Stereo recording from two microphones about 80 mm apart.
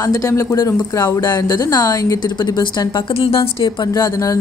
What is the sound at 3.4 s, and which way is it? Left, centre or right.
Speech, left.